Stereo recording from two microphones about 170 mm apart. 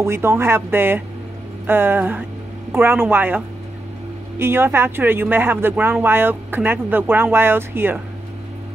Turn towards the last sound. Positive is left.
turn(degrees=-10)  # may be behind; listen again after turning